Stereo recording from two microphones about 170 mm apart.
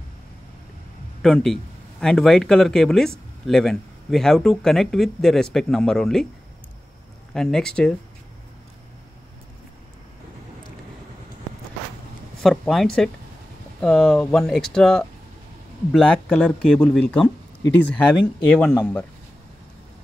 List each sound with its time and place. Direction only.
1.2 s speech: 5° left (ahead or behind)
7.3 s speech: 5° left (ahead or behind)
12.4 s speech: centre (ahead or behind)